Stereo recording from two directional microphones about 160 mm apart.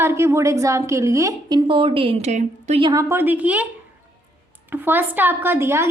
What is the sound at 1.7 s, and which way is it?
A woman's voice, 35° right (ahead or behind).